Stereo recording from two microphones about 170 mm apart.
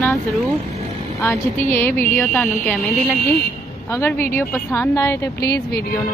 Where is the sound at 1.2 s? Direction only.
15° left (ahead or behind).